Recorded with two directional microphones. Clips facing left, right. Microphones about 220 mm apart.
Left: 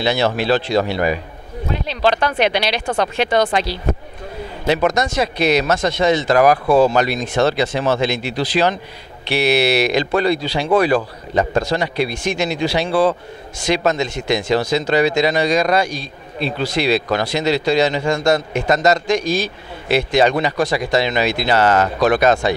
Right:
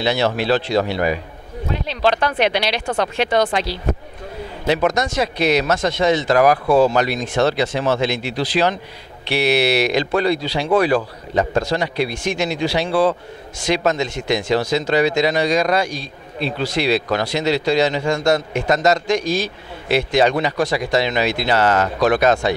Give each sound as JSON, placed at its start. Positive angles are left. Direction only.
{"t": 0.0, "sound": "speech", "side_deg": 15}
{"t": 4.6, "sound": "speech", "side_deg": 20}
{"t": 6.7, "sound": "speech", "side_deg": 35}
{"t": 7.0, "sound": "speech", "side_deg": 15}